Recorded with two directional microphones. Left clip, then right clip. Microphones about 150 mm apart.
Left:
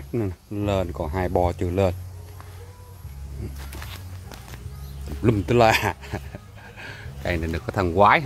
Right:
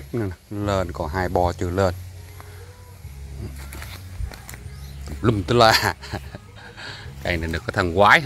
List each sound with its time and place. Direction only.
0.1 s speech: 20° left (ahead or behind)
3.8 s music: 55° right (ahead or behind)
5.2 s speech: 10° left (ahead or behind)